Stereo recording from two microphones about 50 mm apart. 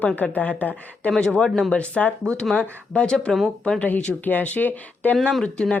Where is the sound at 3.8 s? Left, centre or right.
Left.